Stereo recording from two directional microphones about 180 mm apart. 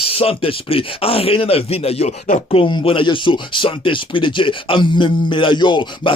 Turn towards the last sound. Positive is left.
turn(degrees=25)  # may be behind; listen again after turning